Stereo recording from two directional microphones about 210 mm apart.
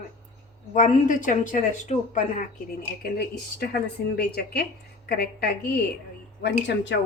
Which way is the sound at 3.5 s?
50° left (ahead or behind).